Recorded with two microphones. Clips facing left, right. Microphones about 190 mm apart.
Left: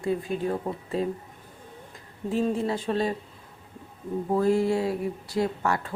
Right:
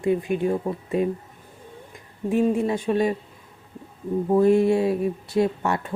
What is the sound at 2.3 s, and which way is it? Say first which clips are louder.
Speech: right 5 dB; 15° right (ahead or behind).